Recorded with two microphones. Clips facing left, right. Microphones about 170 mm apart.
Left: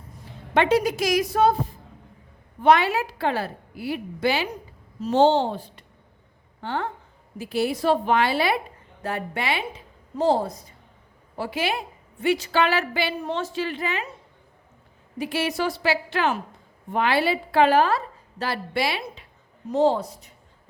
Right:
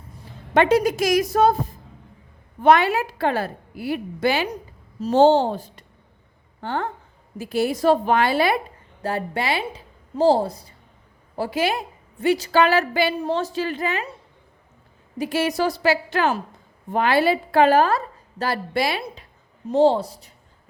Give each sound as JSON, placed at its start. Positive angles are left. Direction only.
{"t": 0.5, "sound": "a woman's voice", "side_deg": -45}
{"t": 9.0, "sound": "a woman's voice", "side_deg": -35}
{"t": 15.2, "sound": "a woman's voice", "side_deg": -40}
{"t": 19.7, "sound": "a woman's voice", "side_deg": -30}